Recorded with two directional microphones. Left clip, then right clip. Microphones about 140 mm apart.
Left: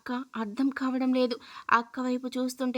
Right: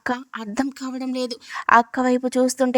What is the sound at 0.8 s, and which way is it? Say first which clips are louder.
Speech: even; centre (ahead or behind).